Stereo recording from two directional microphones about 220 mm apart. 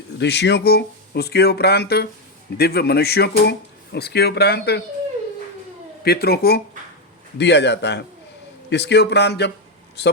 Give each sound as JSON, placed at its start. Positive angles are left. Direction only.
{"t": 0.2, "sound": "speech", "side_deg": 50}
{"t": 6.1, "sound": "speech", "side_deg": 45}